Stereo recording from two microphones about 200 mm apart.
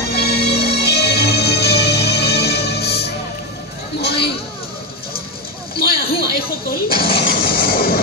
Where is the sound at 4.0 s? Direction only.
55° left (ahead or behind).